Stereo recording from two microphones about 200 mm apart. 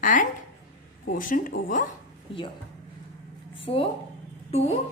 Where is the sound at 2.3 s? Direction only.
25° left (ahead or behind).